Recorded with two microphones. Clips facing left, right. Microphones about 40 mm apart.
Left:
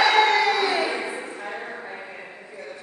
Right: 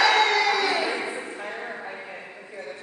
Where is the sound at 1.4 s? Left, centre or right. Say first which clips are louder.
Even; centre.